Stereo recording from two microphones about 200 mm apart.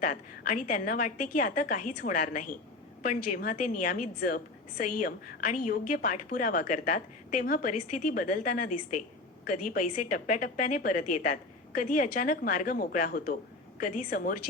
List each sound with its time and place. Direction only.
0.0 s a woman's voice: 40° left (ahead or behind)
9.7 s a woman's voice: 45° left (ahead or behind)